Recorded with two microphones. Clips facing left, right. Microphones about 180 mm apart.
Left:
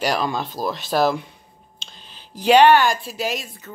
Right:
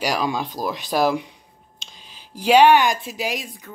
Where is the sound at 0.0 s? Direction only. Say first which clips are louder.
Left 1 dB; 10° right (ahead or behind).